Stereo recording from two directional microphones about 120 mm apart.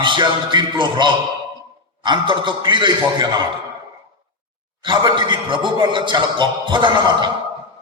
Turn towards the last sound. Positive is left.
turn(degrees=-40)  # may be behind; listen again after turning